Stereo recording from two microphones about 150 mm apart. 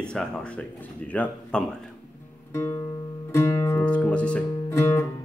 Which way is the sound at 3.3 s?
15° left (ahead or behind).